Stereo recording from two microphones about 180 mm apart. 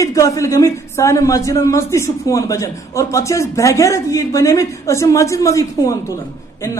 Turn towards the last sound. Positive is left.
turn(degrees=20)  # may be behind; listen again after turning